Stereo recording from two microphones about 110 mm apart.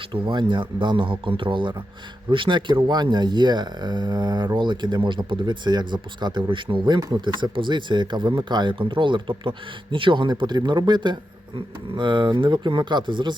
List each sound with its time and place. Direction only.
0.1 s speech: 45° right (ahead or behind)